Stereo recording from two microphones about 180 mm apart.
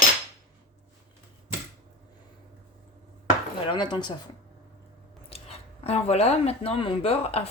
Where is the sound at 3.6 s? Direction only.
25° left (ahead or behind).